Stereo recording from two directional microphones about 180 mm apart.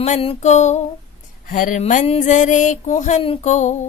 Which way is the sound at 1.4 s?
45° left (ahead or behind).